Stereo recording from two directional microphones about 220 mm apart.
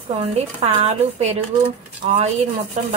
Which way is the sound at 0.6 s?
25° right (ahead or behind).